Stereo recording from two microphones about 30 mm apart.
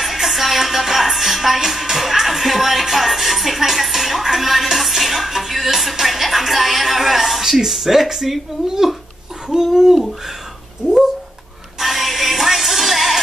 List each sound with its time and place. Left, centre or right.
0.0 s music: centre
6.2 s a sound: centre
10.8 s cat: right
11.8 s music: centre